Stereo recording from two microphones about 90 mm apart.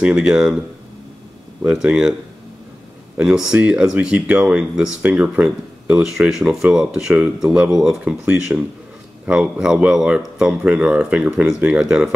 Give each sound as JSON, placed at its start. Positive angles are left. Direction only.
{"t": 0.0, "sound": "speech", "side_deg": -10}
{"t": 1.9, "sound": "speech", "side_deg": -10}
{"t": 3.2, "sound": "speech", "side_deg": -5}